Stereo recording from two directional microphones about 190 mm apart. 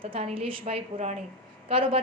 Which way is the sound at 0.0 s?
30° right (ahead or behind).